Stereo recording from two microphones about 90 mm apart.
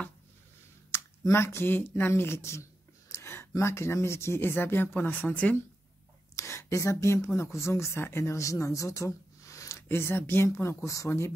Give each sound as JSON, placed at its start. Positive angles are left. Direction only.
{"t": 0.9, "sound": "speech", "side_deg": 30}
{"t": 6.3, "sound": "speech", "side_deg": 30}